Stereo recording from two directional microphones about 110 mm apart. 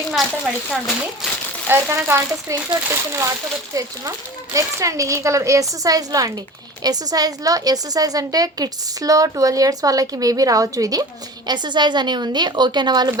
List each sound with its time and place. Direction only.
0.1 s speech: 5° right (ahead or behind)
1.6 s a woman's voice: 20° right (ahead or behind); by 13.1 s 40° right (ahead or behind)